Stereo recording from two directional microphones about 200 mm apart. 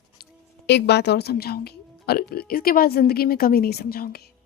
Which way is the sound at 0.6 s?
60° left (ahead or behind).